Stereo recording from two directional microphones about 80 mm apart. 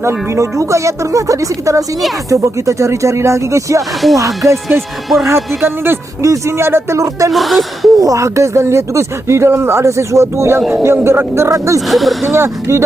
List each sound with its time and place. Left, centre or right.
0.0 s speech: right
4.7 s speech: centre
5.2 s speech: right
7.3 s speech: centre
7.9 s speech: right
11.9 s speech: centre
12.3 s speech: right